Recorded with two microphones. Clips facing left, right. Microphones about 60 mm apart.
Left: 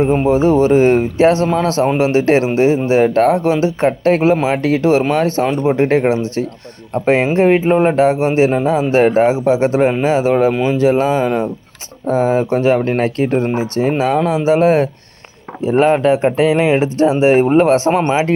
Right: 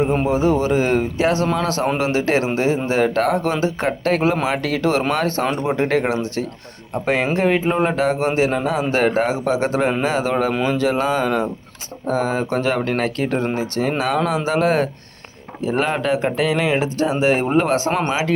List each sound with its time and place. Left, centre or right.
0.0 s speech: centre
0.3 s speech: left
3.1 s speech: left; by 10.8 s centre
10.8 s speech: left